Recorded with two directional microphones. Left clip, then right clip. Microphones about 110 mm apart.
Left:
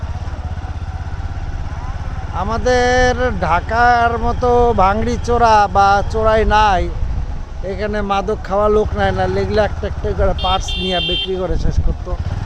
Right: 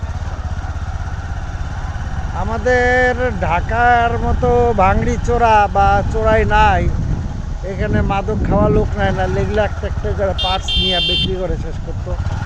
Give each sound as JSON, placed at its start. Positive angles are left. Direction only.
{"t": 2.4, "sound": "speech", "side_deg": 35}